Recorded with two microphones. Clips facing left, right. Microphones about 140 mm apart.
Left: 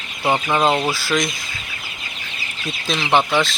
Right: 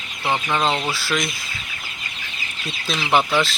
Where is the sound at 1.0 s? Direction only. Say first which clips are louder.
Left 3 dB; centre (ahead or behind).